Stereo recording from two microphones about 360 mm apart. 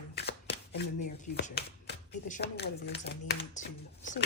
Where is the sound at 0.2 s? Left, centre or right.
Left.